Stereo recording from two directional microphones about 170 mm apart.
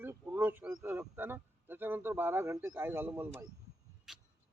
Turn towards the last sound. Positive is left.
turn(degrees=-5)  # may be behind; listen again after turning